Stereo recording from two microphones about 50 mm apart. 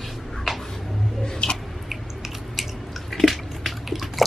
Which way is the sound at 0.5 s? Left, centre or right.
Centre.